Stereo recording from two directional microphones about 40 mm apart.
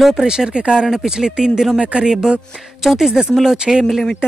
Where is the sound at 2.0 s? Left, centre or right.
Centre.